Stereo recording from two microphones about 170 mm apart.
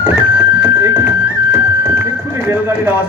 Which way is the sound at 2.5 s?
15° right (ahead or behind).